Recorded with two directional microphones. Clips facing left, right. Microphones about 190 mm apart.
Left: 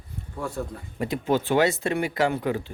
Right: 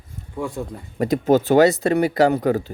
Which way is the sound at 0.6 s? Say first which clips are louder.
Right 2 dB; 20° right (ahead or behind).